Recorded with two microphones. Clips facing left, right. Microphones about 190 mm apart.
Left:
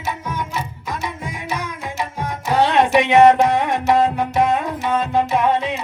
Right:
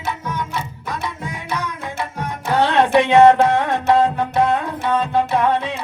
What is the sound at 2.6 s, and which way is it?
Music, 15° left (ahead or behind).